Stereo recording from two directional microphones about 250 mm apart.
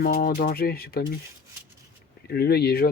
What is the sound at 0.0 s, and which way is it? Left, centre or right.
Speech, left.